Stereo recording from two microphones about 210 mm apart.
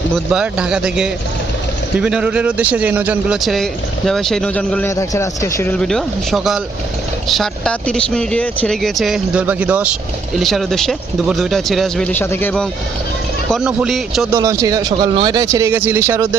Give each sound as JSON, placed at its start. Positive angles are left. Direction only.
{"t": 0.3, "sound": "speech", "side_deg": -5}
{"t": 13.5, "sound": "speech", "side_deg": -5}
{"t": 14.3, "sound": "speech", "side_deg": -15}